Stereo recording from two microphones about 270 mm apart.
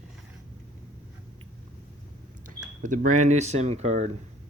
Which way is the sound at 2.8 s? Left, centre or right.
Right.